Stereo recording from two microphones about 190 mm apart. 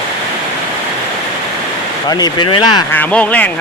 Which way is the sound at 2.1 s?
20° left (ahead or behind).